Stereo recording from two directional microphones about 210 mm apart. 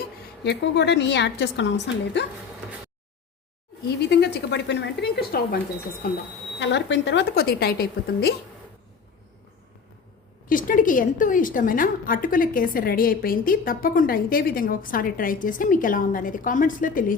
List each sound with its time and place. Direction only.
0.4 s a woman's voice: 55° left (ahead or behind)
3.8 s a woman's voice: 50° left (ahead or behind)
6.6 s a woman's voice: 60° left (ahead or behind)
10.5 s a woman's voice: 40° left (ahead or behind)